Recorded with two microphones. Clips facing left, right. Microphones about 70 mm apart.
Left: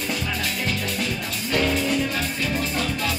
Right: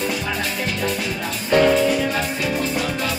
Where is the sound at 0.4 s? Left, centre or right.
Right.